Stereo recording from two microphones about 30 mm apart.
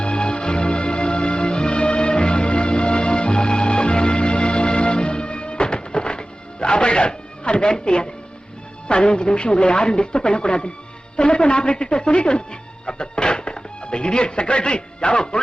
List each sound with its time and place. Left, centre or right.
0.0 s music: left
8.9 s speech: left